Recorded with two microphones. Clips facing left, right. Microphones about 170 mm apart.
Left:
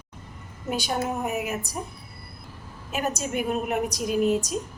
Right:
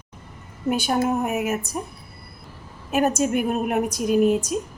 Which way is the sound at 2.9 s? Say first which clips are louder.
Right 8 dB; 50° right (ahead or behind).